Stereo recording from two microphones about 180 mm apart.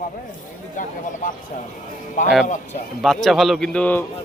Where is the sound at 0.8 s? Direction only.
45° left (ahead or behind).